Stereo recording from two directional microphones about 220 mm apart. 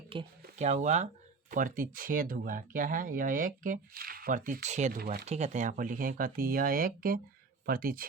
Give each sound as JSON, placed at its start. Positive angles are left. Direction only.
{"t": 0.1, "sound": "speech", "side_deg": -25}